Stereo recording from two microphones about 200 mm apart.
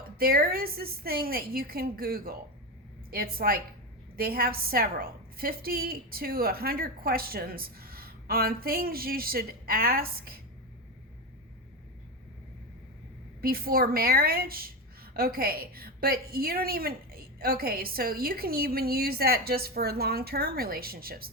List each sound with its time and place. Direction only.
0.2 s a woman's voice: 50° right (ahead or behind)
13.4 s a woman's voice: 50° right (ahead or behind)